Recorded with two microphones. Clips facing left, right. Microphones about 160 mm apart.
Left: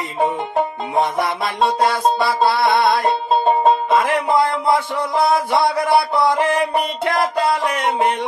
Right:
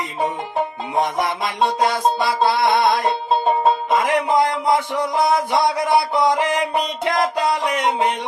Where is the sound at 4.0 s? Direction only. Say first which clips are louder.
Even; 15° right (ahead or behind).